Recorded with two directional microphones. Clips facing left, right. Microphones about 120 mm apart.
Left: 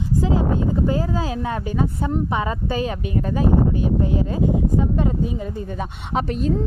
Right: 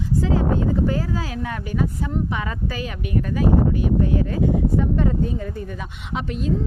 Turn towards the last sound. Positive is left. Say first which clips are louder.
# left 4 dB
turn(degrees=40)  # may be behind; listen again after turning